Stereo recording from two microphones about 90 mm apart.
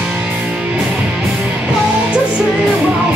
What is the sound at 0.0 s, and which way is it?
Music, 15° right (ahead or behind).